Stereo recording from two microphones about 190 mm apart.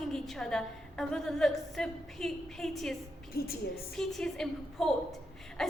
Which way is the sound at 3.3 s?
50° left (ahead or behind).